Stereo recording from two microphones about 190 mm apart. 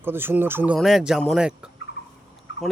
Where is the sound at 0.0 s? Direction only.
10° right (ahead or behind).